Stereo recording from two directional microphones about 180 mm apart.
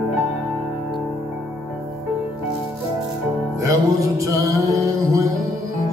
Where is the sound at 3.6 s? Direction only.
20° right (ahead or behind).